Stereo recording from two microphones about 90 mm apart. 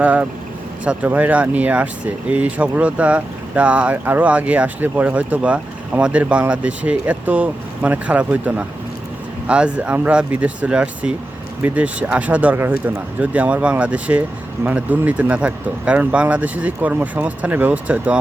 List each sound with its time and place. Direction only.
0.0 s speech: 15° right (ahead or behind)